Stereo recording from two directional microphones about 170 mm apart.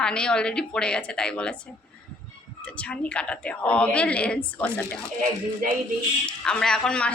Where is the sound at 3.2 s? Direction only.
5° left (ahead or behind).